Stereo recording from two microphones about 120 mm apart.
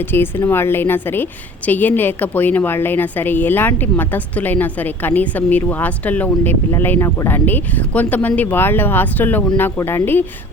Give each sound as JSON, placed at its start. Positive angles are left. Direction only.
{"t": 0.0, "sound": "a woman's voice", "side_deg": 20}